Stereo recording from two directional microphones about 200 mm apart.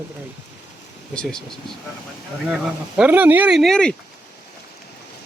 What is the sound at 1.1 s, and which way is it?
Speech, 5° left (ahead or behind).